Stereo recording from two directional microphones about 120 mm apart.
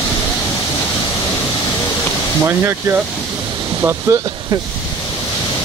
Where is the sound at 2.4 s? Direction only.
20° right (ahead or behind).